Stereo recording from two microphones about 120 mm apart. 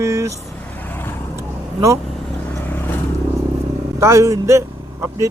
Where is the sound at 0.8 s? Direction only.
20° left (ahead or behind).